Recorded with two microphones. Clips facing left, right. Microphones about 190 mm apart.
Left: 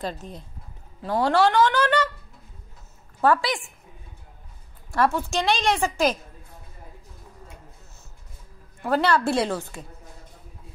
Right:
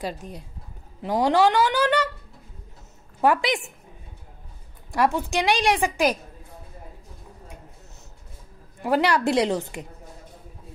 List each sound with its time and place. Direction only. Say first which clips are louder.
0.0 s a woman's voice: even; 10° right (ahead or behind)
3.2 s speech: even; 15° right (ahead or behind)
4.9 s a woman's voice: even; 15° right (ahead or behind)
8.8 s a woman's voice: right 1 dB; 15° right (ahead or behind)